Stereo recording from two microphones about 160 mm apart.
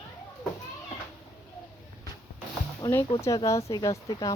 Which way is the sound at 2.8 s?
20° left (ahead or behind).